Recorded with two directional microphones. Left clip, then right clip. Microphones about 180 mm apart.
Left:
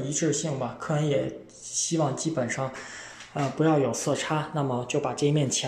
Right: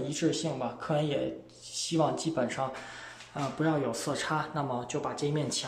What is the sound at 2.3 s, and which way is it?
Speech, 5° right (ahead or behind).